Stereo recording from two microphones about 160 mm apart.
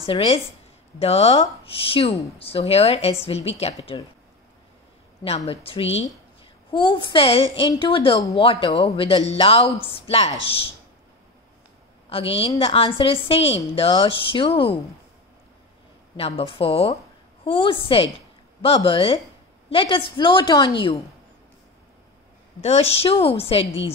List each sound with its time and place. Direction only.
0.0 s speech: 35° left (ahead or behind)
5.2 s speech: 40° left (ahead or behind)
12.1 s speech: 35° left (ahead or behind)
16.2 s speech: 35° left (ahead or behind)
22.6 s speech: 40° left (ahead or behind)